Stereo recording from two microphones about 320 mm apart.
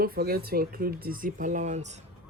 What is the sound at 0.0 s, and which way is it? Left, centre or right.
Speech, right.